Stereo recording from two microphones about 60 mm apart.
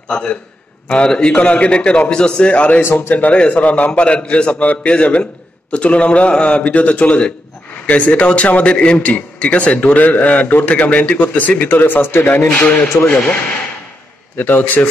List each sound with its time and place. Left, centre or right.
0.1 s a man's voice: centre
2.8 s a man's voice: left
3.2 s a man's voice: left